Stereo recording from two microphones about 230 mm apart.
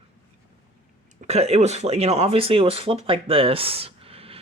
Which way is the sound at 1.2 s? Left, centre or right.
Right.